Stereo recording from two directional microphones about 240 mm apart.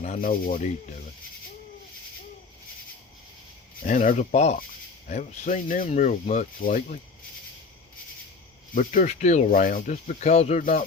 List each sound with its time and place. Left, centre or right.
0.0 s speech: left
3.8 s speech: left
8.7 s speech: left